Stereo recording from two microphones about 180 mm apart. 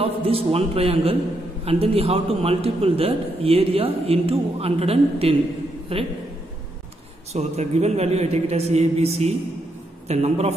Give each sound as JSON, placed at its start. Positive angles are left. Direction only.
{"t": 0.0, "sound": "a man's voice", "side_deg": -30}
{"t": 7.3, "sound": "a man's voice", "side_deg": -35}